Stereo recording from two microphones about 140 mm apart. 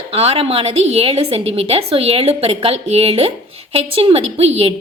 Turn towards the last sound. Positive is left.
turn(degrees=-45)  # may be behind; listen again after turning